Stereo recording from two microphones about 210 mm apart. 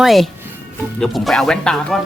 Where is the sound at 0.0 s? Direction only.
Centre (ahead or behind).